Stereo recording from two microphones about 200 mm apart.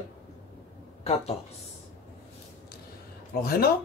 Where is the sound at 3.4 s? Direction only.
50° left (ahead or behind).